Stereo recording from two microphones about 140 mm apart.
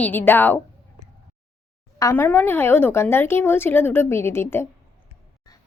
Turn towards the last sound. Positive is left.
turn(degrees=15)  # may be behind; listen again after turning